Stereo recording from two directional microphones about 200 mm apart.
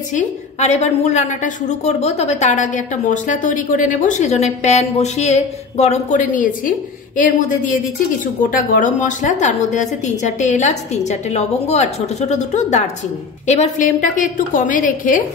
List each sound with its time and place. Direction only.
0.1 s a woman's voice: 35° left (ahead or behind)